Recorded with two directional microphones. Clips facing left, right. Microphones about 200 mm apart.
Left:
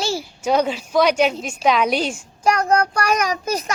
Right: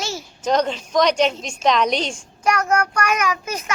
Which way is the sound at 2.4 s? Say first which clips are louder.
Left 2 dB; 30° left (ahead or behind).